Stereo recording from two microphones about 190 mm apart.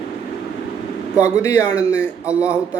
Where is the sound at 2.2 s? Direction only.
5° right (ahead or behind).